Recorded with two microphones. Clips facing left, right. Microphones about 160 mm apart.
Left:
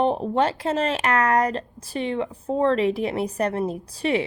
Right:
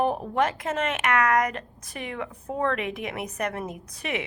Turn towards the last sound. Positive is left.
turn(degrees=30)  # may be behind; listen again after turning